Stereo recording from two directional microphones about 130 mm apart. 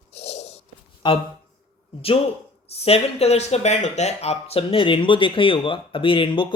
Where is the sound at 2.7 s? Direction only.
50° left (ahead or behind).